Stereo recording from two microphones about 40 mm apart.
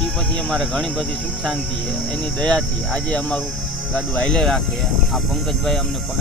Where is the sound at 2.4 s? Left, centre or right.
Left.